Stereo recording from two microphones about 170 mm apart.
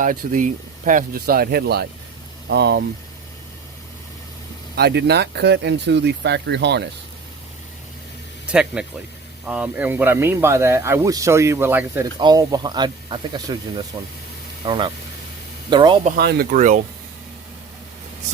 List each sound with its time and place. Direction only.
0.0 s speech: 50° right (ahead or behind); by 2.8 s 75° right (ahead or behind)
4.7 s speech: 75° right (ahead or behind)
8.4 s speech: 5° right (ahead or behind)
12.2 s speech: 25° right (ahead or behind)
16.1 s speech: 60° right (ahead or behind)